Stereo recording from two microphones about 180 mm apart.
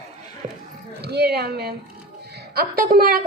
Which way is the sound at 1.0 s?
65° right (ahead or behind).